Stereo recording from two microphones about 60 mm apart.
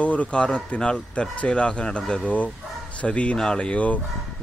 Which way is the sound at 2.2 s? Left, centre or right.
Left.